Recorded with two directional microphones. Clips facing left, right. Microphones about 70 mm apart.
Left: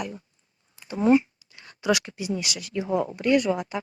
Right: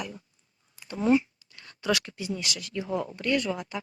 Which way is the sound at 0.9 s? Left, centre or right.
Centre.